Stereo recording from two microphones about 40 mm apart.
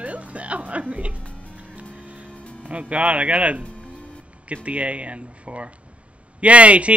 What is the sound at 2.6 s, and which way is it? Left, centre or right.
Speech, right.